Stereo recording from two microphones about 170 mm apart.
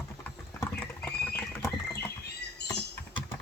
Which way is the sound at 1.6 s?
15° left (ahead or behind).